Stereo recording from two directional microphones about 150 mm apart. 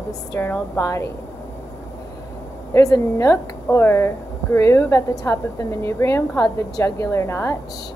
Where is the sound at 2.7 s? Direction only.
20° left (ahead or behind).